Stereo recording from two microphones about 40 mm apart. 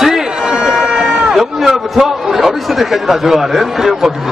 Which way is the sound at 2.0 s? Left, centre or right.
Centre.